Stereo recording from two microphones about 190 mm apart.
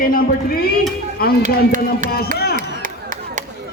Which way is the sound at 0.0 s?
50° left (ahead or behind).